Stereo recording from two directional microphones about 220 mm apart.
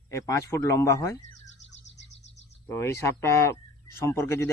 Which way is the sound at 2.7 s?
10° left (ahead or behind).